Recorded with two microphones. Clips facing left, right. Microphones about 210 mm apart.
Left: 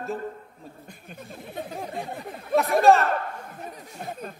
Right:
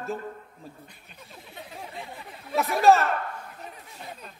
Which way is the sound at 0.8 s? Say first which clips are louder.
Left 8 dB; 50° left (ahead or behind).